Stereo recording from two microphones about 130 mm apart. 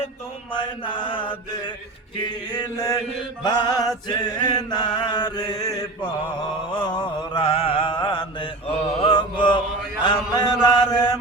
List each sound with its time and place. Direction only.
0.5 s chant: 40° left (ahead or behind)